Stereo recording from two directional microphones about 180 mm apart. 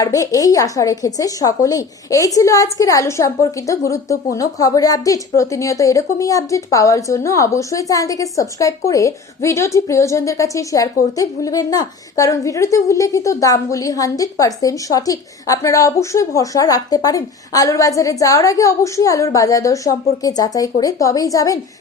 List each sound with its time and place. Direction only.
0.0 s a woman's voice: 20° left (ahead or behind)